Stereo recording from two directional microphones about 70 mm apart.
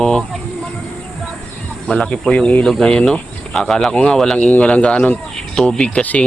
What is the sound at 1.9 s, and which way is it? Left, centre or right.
Speech, centre.